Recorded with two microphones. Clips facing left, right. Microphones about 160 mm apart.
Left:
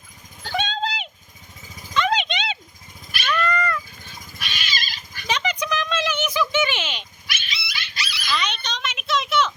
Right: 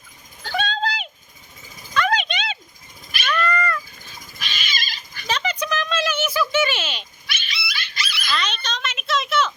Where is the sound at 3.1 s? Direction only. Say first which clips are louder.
Even; 5° left (ahead or behind).